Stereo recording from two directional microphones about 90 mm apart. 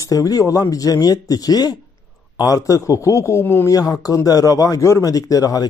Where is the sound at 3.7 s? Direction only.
40° left (ahead or behind).